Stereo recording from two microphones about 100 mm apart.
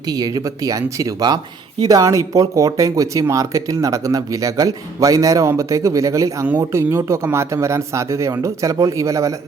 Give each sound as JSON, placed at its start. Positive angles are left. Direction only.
{"t": 0.1, "sound": "speech", "side_deg": -40}